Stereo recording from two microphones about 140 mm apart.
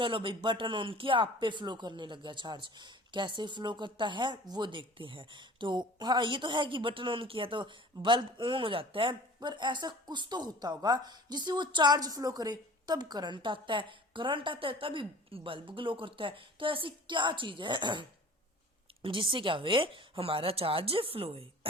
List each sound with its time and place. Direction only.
0.0 s speech: 35° right (ahead or behind)
19.0 s speech: 35° right (ahead or behind)